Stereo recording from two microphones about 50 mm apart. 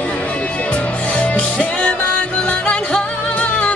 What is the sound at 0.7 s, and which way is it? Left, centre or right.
Music, left.